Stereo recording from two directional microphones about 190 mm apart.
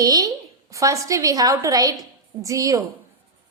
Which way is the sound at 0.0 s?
20° right (ahead or behind).